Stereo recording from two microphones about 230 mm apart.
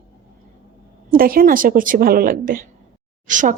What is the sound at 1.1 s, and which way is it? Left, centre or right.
A woman's voice, right.